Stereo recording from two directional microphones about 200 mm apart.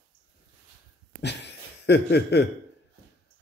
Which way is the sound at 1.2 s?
60° left (ahead or behind).